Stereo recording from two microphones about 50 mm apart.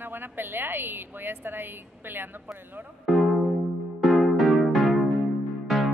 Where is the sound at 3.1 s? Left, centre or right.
Centre.